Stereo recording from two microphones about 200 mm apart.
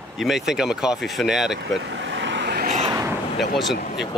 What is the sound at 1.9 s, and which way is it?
Vehicle, 65° right (ahead or behind).